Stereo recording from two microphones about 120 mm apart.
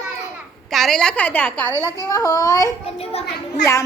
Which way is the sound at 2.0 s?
25° left (ahead or behind).